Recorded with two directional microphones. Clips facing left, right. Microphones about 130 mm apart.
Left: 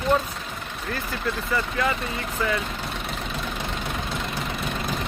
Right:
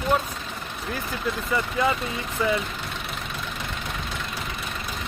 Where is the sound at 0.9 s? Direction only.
15° right (ahead or behind).